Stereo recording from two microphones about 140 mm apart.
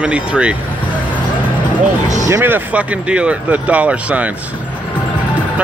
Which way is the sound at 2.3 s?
15° right (ahead or behind).